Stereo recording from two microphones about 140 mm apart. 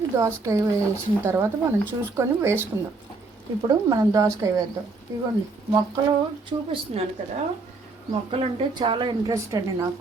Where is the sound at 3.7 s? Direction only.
25° right (ahead or behind).